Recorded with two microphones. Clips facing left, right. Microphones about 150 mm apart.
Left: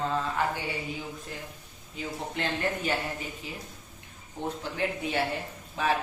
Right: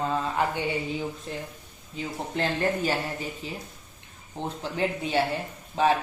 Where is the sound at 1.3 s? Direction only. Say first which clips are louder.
Right 5 dB; 25° right (ahead or behind).